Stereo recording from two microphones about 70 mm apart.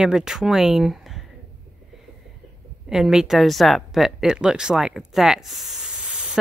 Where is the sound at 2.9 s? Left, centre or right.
Centre.